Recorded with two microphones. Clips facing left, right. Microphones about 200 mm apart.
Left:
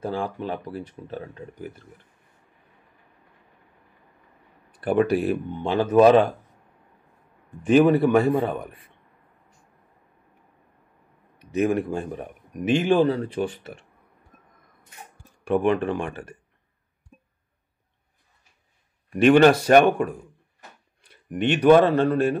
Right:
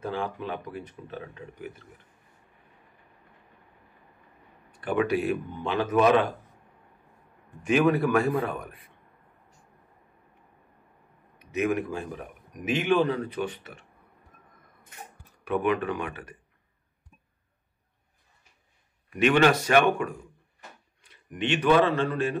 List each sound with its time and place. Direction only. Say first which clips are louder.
0.0 s speech: left 3 dB; 35° left (ahead or behind)
4.7 s speech: left 5 dB; 35° left (ahead or behind)
7.6 s a man's voice: left 6 dB; 30° left (ahead or behind)
11.5 s speech: left 4 dB; 30° left (ahead or behind)
15.4 s speech: left 5 dB; 30° left (ahead or behind)
19.1 s speech: left 6 dB; 35° left (ahead or behind)
21.5 s speech: left 6 dB; 45° left (ahead or behind)